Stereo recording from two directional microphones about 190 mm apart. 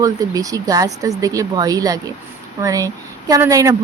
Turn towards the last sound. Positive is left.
turn(degrees=-15)  # may be behind; listen again after turning